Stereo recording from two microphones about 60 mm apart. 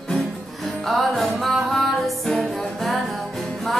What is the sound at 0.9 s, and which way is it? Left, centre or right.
Music, centre.